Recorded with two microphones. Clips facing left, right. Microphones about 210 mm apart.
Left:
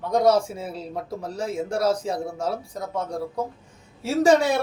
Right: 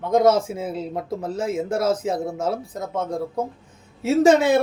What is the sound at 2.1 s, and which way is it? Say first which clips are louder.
Speech: right 3 dB; 20° right (ahead or behind).